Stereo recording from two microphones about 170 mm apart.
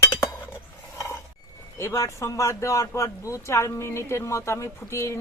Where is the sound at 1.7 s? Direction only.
15° left (ahead or behind).